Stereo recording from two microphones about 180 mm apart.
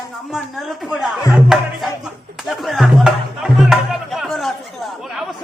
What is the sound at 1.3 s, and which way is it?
Music, centre (ahead or behind).